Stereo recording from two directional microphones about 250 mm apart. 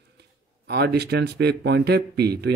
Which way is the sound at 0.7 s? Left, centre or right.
Right.